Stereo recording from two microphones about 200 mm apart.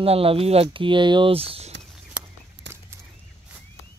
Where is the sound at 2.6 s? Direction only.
60° right (ahead or behind).